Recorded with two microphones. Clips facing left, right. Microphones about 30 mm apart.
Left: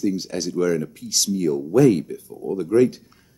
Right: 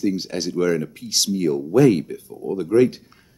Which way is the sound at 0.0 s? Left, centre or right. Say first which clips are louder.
Right 1 dB; right.